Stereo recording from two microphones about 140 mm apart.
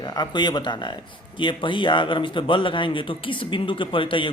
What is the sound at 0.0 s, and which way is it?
A man's voice, 30° left (ahead or behind).